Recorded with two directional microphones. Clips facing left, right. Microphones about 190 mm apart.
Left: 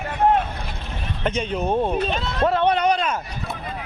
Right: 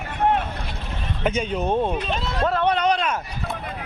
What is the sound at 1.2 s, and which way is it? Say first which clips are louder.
A man's voice: even; centre (ahead or behind).